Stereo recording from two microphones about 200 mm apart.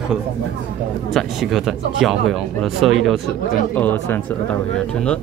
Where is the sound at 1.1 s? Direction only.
Centre (ahead or behind).